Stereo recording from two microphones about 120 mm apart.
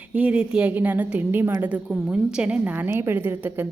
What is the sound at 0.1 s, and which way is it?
A woman's voice, 10° right (ahead or behind).